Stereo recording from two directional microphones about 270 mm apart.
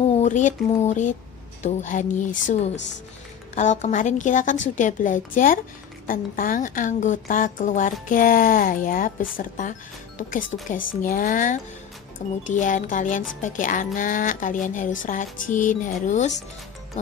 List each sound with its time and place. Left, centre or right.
0.1 s a woman's voice: left